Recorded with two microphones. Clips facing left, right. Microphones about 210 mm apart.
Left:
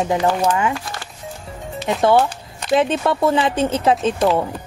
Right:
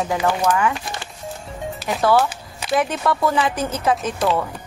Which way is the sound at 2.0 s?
25° left (ahead or behind).